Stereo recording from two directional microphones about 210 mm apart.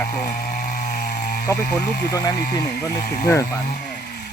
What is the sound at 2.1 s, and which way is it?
Speech, 15° left (ahead or behind).